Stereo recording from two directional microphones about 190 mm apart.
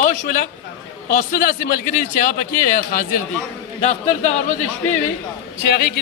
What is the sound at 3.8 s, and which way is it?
Speech, 35° left (ahead or behind).